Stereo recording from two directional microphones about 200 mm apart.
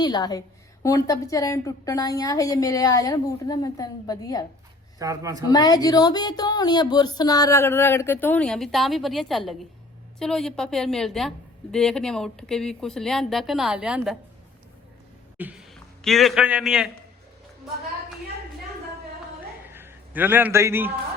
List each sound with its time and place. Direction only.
0.0 s a woman's voice: 20° left (ahead or behind)
4.9 s a man's voice: 15° right (ahead or behind)
5.5 s a woman's voice: 20° left (ahead or behind); by 14.2 s 5° right (ahead or behind)
15.4 s a man's voice: 5° right (ahead or behind)
19.7 s a man's voice: 10° right (ahead or behind)